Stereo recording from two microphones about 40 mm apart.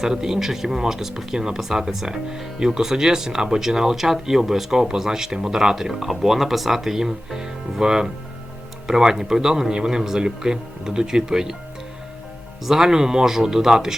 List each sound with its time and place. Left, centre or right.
0.0 s speech: centre
12.6 s speech: centre